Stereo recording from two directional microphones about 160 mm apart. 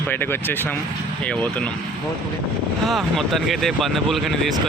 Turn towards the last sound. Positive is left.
turn(degrees=0)  # may be behind; listen again after turning